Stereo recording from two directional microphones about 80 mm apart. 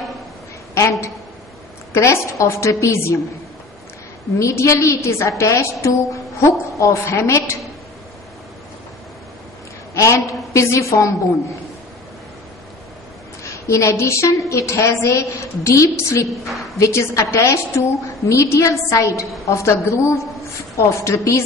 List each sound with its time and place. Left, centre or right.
0.7 s a woman's voice: left
4.4 s a woman's voice: left
9.9 s a woman's voice: left
13.4 s a woman's voice: left
16.4 s a woman's voice: centre
16.7 s a woman's voice: left